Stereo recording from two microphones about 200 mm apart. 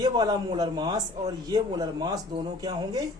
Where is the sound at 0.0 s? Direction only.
20° right (ahead or behind).